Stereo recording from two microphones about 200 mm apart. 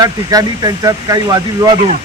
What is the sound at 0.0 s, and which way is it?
Speech, 20° right (ahead or behind).